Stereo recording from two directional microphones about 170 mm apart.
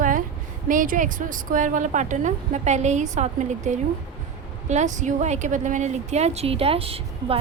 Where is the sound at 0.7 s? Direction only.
50° right (ahead or behind).